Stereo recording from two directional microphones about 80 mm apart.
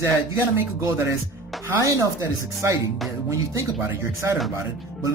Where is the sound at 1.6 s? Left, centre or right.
Right.